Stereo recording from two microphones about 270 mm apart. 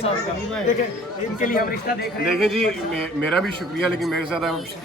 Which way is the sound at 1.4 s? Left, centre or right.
Left.